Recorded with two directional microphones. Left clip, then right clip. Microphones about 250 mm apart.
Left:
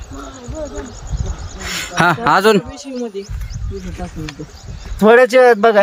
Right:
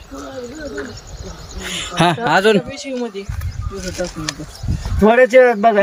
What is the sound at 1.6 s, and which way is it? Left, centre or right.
Speech, centre.